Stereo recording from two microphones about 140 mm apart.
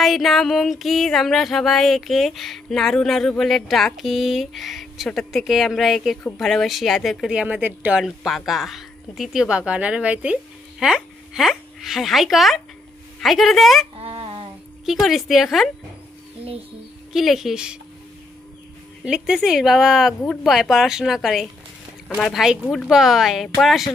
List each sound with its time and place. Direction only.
0.0 s music: centre (ahead or behind)
13.9 s a sound: 40° right (ahead or behind)
14.2 s child singing: 30° right (ahead or behind)
14.9 s music: centre (ahead or behind)
17.1 s music: centre (ahead or behind)
19.0 s music: 5° right (ahead or behind)